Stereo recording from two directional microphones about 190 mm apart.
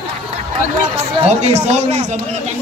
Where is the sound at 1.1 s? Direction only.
35° right (ahead or behind).